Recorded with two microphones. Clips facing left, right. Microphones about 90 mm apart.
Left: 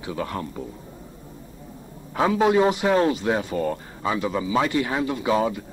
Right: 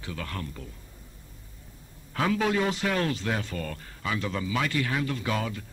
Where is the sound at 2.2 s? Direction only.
25° left (ahead or behind).